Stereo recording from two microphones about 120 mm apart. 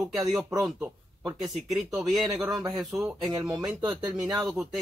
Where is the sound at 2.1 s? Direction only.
Centre (ahead or behind).